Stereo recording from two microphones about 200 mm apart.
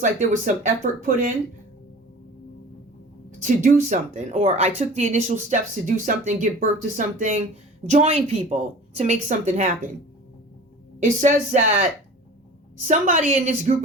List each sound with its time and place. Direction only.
0.0 s speech: 40° right (ahead or behind)
3.4 s speech: 40° right (ahead or behind)
11.0 s speech: 35° right (ahead or behind)